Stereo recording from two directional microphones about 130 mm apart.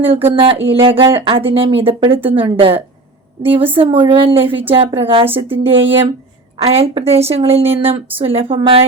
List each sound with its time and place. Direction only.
0.1 s speech: 45° right (ahead or behind)